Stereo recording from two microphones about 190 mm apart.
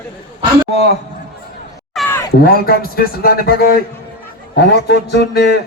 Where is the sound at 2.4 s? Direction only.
50° left (ahead or behind).